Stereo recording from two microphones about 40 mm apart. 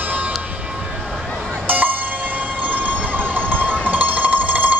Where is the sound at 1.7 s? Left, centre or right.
Right.